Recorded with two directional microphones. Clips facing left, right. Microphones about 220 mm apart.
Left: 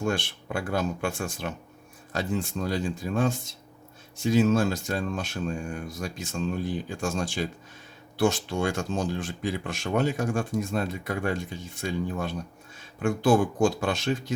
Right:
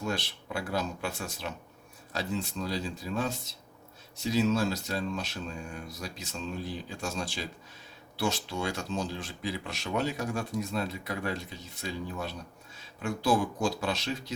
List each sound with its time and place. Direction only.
0.0 s speech: 50° left (ahead or behind)